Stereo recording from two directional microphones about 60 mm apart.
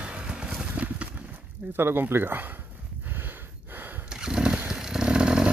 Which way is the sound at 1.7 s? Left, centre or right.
Right.